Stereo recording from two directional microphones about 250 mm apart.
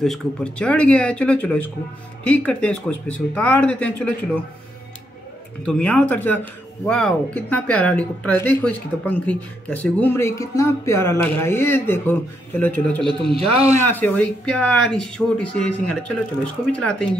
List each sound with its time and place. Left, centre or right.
0.0 s speech: centre
5.7 s speech: centre
13.4 s speech: right
13.7 s speech: centre